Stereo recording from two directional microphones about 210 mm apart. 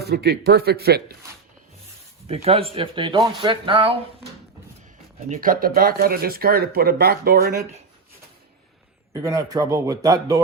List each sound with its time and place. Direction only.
0.0 s speech: 50° right (ahead or behind)
2.2 s speech: 30° right (ahead or behind)
5.3 s speech: 40° right (ahead or behind)
9.1 s speech: 15° right (ahead or behind)